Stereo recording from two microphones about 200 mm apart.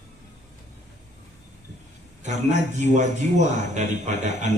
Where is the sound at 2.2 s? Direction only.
35° right (ahead or behind).